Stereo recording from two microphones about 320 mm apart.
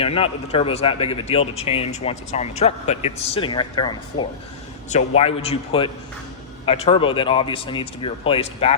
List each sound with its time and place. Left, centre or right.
0.0 s a man's voice: centre